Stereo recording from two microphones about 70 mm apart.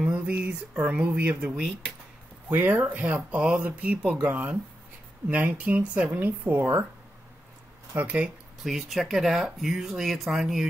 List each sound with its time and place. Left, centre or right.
0.1 s speech: right
2.5 s speech: right
7.9 s speech: right
8.6 s speech: centre